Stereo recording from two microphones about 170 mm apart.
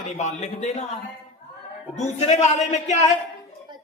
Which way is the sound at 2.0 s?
40° left (ahead or behind).